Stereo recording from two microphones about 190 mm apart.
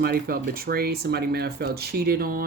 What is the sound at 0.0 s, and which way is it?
Speech, 55° right (ahead or behind).